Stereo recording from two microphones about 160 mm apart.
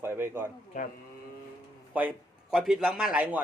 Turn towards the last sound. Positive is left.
turn(degrees=-5)  # may be behind; listen again after turning